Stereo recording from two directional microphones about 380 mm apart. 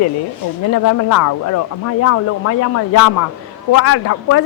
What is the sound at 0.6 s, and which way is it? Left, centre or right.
Speech, left.